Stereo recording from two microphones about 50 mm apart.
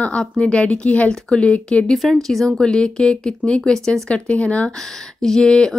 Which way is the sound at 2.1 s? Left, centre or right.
Centre.